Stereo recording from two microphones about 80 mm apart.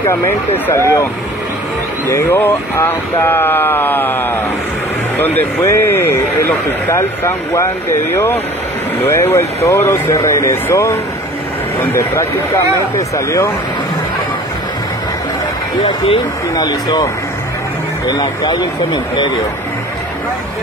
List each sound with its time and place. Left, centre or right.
0.1 s speech: left
2.0 s speech: left
16.5 s speech: left
18.0 s speech: left